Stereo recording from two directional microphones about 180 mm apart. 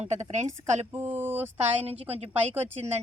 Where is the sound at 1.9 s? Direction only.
35° right (ahead or behind).